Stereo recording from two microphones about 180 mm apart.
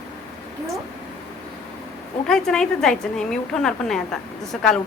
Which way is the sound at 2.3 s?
5° left (ahead or behind).